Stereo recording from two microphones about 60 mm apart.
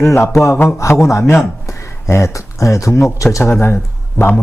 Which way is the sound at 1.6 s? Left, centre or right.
Left.